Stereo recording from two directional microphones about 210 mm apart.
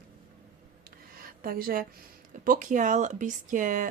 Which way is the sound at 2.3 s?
40° right (ahead or behind).